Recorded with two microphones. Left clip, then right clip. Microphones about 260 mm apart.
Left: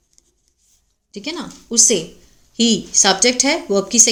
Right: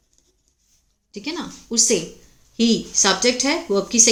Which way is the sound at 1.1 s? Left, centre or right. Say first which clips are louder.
Left 2 dB; centre.